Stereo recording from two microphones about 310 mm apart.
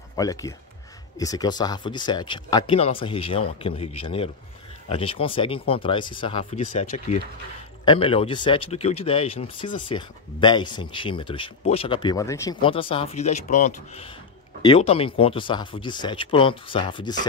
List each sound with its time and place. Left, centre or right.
0.1 s speech: centre